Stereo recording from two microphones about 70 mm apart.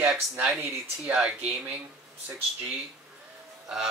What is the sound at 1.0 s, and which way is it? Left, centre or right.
Speech, centre.